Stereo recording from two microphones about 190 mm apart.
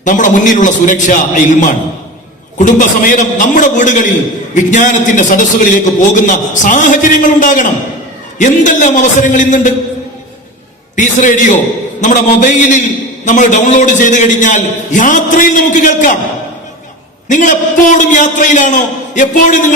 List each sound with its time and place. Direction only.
0.0 s a man's voice: 40° left (ahead or behind)
10.9 s a man's voice: 40° left (ahead or behind)
17.2 s a man's voice: 40° left (ahead or behind)